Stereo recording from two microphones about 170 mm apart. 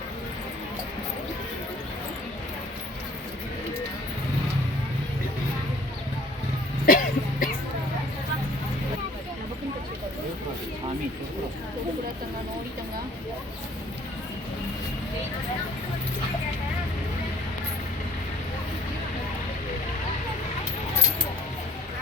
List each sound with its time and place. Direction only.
6.8 s cough: 55° left (ahead or behind)